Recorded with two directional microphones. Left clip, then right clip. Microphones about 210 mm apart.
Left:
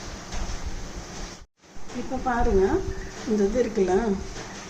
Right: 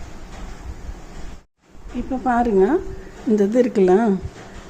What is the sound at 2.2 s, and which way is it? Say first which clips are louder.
A woman's voice: right 6 dB; 45° right (ahead or behind).